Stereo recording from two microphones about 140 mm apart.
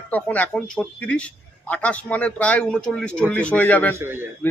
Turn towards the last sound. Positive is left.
turn(degrees=-15)  # may be behind; listen again after turning